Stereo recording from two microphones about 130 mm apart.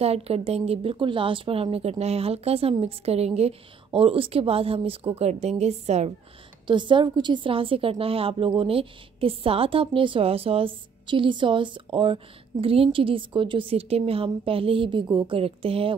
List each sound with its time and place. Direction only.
0.0 s a woman's voice: 50° right (ahead or behind)
6.7 s a woman's voice: 40° right (ahead or behind)